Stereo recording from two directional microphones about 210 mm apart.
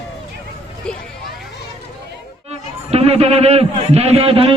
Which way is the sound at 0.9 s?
5° left (ahead or behind).